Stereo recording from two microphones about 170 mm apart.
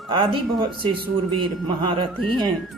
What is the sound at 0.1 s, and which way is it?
Speech, 30° right (ahead or behind).